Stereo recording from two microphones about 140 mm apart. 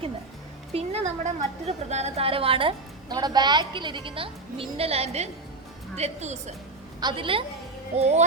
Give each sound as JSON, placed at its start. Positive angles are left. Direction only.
{"t": 0.7, "sound": "a woman's voice", "side_deg": -50}
{"t": 7.0, "sound": "a woman's voice", "side_deg": -35}
{"t": 7.9, "sound": "a woman's voice", "side_deg": -50}